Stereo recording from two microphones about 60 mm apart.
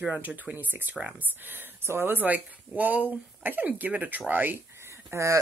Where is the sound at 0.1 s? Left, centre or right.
Right.